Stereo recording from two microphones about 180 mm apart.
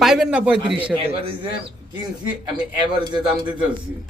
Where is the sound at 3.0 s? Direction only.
25° right (ahead or behind).